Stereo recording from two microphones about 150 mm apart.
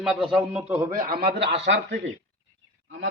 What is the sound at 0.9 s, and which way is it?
Speech, 65° right (ahead or behind).